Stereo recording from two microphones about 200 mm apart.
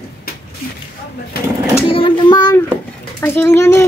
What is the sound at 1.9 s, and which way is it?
A child's voice, 25° left (ahead or behind).